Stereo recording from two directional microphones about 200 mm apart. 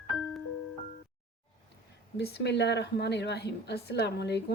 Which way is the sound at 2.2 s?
55° left (ahead or behind).